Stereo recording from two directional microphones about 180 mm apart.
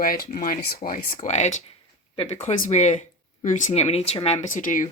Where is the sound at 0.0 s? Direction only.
50° left (ahead or behind).